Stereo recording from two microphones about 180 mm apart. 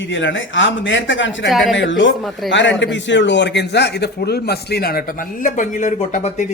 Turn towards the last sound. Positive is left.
turn(degrees=40)  # may be behind; listen again after turning